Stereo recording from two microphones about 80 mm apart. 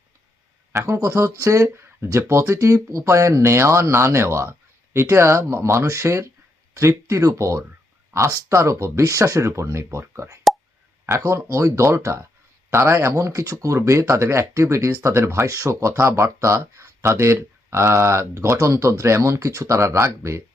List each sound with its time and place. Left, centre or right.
0.7 s speech: right